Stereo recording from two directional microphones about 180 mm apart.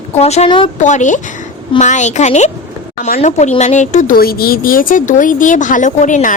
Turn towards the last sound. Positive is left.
turn(degrees=45)  # may be behind; listen again after turning